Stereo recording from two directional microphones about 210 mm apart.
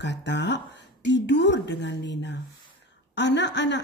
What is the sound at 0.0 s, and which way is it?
A woman's voice, 55° left (ahead or behind).